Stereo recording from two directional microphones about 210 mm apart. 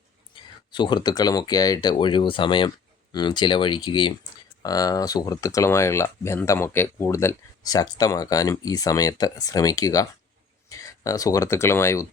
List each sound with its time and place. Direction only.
0.7 s speech: 20° left (ahead or behind)